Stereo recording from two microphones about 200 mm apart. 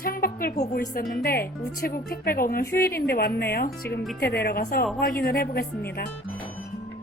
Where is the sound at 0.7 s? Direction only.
50° left (ahead or behind).